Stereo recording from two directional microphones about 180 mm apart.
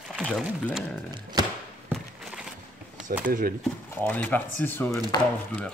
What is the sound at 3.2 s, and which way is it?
Speech, 50° right (ahead or behind).